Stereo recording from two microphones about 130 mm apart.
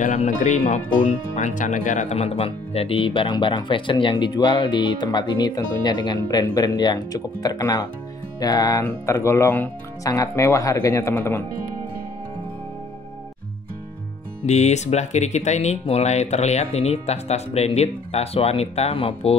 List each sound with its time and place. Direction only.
0.0 s speech: 75° left (ahead or behind); by 11.4 s 15° left (ahead or behind)
14.4 s speech: 60° left (ahead or behind)